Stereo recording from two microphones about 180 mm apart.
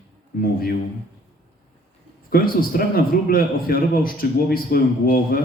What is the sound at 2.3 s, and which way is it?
A man's voice, 55° left (ahead or behind).